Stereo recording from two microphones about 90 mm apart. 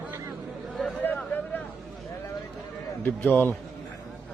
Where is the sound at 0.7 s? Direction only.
Centre (ahead or behind).